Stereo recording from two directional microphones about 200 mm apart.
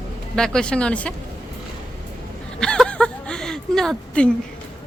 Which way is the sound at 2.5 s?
5° left (ahead or behind).